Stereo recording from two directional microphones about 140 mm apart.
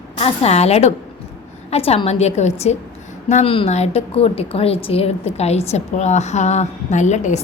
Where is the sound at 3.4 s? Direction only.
45° left (ahead or behind).